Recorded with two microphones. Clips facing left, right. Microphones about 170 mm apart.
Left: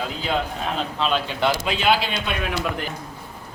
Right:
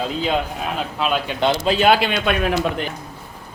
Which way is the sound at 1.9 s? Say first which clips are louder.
Right 1 dB; 65° right (ahead or behind).